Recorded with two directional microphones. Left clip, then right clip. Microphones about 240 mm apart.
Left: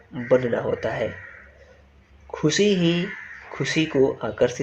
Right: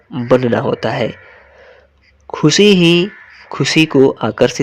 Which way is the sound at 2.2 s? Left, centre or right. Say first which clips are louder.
Right 10 dB; right.